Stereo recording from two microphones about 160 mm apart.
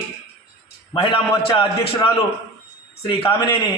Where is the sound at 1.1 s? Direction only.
35° left (ahead or behind).